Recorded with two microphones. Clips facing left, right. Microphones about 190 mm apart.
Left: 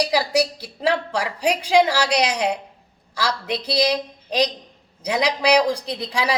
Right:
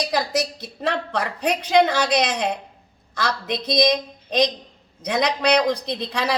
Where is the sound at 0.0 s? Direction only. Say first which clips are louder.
Left 3 dB; 10° left (ahead or behind).